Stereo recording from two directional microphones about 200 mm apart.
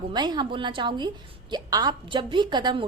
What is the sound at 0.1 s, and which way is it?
A woman's voice, 20° right (ahead or behind).